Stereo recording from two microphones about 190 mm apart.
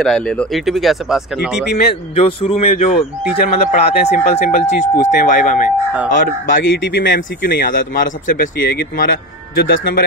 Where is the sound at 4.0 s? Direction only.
35° left (ahead or behind).